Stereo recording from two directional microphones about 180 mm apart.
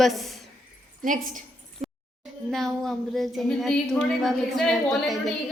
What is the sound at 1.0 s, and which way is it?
Speech, 50° right (ahead or behind).